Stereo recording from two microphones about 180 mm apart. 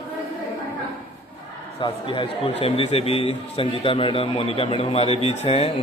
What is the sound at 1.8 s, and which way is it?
A man's voice, 30° left (ahead or behind).